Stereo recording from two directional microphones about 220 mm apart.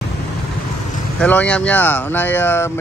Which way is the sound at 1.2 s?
5° left (ahead or behind).